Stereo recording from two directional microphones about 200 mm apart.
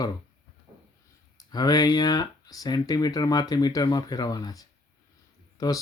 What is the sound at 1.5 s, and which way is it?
Speech, 20° left (ahead or behind).